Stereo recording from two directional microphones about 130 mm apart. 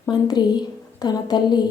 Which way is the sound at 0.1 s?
35° left (ahead or behind).